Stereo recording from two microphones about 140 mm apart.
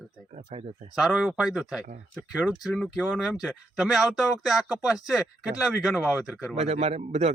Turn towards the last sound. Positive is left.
turn(degrees=-50)  # may be behind; listen again after turning